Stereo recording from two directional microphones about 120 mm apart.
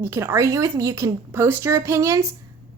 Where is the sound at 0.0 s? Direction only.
20° right (ahead or behind).